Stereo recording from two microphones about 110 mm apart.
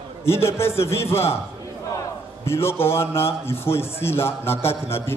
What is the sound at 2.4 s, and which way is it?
Speech, 25° left (ahead or behind).